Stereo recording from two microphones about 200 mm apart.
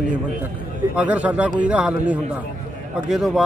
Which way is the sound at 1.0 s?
5° right (ahead or behind).